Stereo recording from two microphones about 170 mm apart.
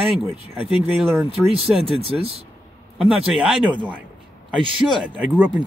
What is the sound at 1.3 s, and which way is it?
Speech, 35° right (ahead or behind).